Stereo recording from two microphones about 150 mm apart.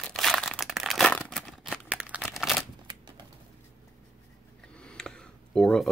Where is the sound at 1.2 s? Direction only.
5° left (ahead or behind).